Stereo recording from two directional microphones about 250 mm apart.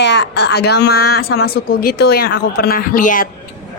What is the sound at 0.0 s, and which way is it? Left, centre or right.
A woman's voice, left.